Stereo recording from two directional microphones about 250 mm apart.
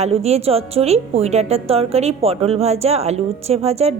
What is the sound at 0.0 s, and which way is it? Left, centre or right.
A woman's voice, right.